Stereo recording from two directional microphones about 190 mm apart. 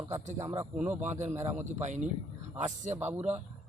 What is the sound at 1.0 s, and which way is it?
Speech, 40° right (ahead or behind).